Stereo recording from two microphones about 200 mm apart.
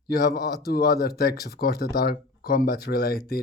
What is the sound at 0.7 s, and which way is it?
Speech, 50° left (ahead or behind).